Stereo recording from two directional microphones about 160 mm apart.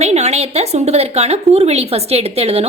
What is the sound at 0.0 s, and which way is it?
Speech, 45° right (ahead or behind).